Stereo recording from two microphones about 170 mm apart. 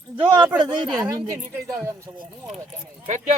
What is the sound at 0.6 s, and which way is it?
Speech, 25° right (ahead or behind).